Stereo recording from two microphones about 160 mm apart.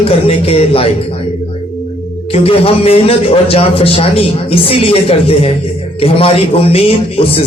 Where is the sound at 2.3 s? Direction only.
35° left (ahead or behind).